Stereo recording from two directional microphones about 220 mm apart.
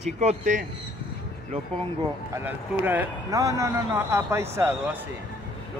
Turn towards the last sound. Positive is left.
turn(degrees=-10)  # may be behind; listen again after turning